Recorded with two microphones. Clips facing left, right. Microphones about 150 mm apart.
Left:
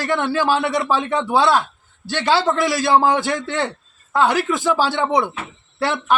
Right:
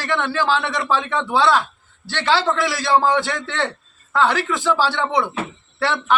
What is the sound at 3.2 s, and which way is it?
Speech, 45° left (ahead or behind).